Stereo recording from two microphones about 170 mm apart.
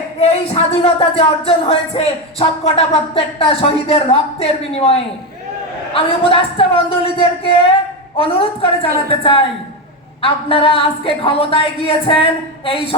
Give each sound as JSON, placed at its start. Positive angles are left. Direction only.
{"t": 0.2, "sound": "speech", "side_deg": 35}